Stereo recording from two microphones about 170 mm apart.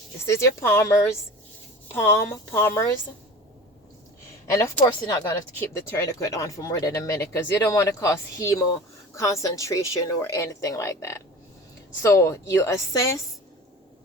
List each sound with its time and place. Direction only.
0.3 s speech: 15° left (ahead or behind)
4.9 s a woman's voice: 20° left (ahead or behind)